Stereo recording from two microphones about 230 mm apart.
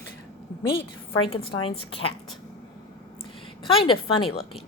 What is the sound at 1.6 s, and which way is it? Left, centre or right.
Speech, left.